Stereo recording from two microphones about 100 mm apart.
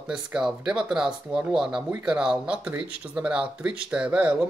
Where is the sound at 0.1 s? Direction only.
5° right (ahead or behind).